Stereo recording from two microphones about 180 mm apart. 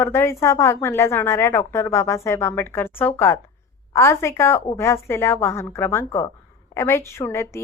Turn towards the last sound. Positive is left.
turn(degrees=15)  # may be behind; listen again after turning